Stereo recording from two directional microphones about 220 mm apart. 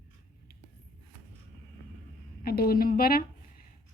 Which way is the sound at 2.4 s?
45° left (ahead or behind).